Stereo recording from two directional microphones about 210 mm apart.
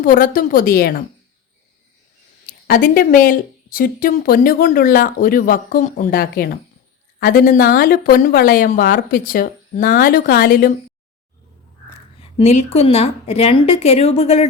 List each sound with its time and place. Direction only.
0.0 s speech: 40° left (ahead or behind)
2.5 s speech: 40° left (ahead or behind)
12.4 s a woman's voice: 30° left (ahead or behind)